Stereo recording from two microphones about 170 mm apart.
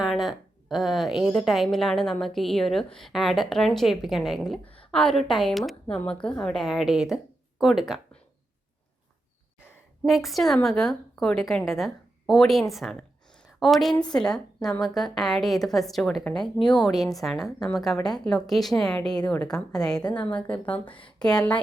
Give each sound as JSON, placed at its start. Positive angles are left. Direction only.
{"t": 0.0, "sound": "a woman's voice", "side_deg": 0}
{"t": 10.0, "sound": "a woman's voice", "side_deg": 0}
{"t": 20.2, "sound": "speech", "side_deg": 25}
{"t": 20.7, "sound": "a woman's voice", "side_deg": 10}